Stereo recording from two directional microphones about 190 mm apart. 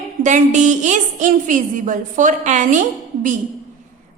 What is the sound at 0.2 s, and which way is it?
A woman's voice, 40° right (ahead or behind).